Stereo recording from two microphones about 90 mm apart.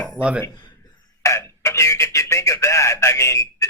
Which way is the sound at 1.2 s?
35° left (ahead or behind).